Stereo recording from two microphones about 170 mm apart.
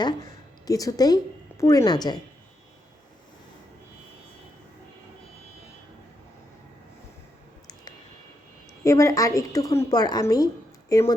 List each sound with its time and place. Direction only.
0.6 s a woman's voice: 20° left (ahead or behind)
8.8 s a woman's voice: 20° left (ahead or behind)